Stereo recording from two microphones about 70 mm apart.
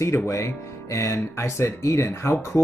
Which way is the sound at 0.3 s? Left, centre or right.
Left.